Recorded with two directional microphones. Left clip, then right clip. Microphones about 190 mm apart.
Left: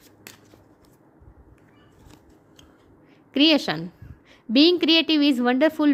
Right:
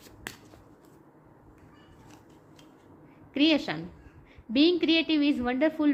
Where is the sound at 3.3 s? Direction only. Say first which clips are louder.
Left 6 dB; 55° left (ahead or behind).